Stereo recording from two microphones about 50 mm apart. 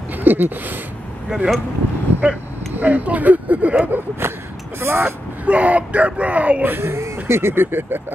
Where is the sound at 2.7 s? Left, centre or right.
Right.